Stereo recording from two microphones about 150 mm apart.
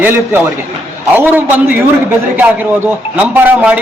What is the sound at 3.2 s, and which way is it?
Speech, 10° right (ahead or behind).